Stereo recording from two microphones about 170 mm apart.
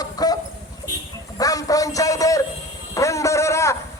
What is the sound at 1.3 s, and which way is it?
A man's voice, 20° left (ahead or behind).